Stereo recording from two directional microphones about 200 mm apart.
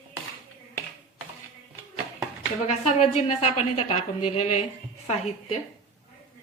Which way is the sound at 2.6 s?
35° left (ahead or behind).